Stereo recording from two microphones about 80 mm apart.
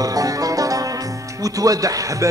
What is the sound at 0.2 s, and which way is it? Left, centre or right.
Music, right.